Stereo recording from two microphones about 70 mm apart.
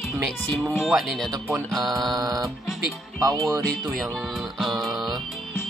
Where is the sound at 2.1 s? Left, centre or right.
Right.